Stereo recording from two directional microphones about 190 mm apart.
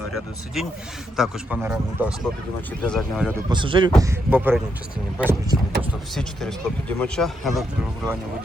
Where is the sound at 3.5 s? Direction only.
25° right (ahead or behind).